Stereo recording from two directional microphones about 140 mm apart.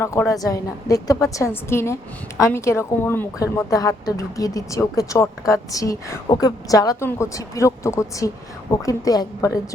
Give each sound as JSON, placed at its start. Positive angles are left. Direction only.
{"t": 0.0, "sound": "a woman's voice", "side_deg": 20}